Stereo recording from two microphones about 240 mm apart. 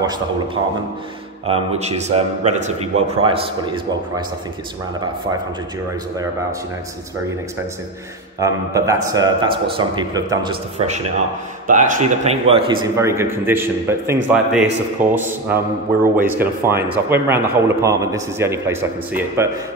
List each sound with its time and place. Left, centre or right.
1.4 s a man's voice: right
8.4 s a man's voice: centre
11.6 s a man's voice: right; by 19.5 s centre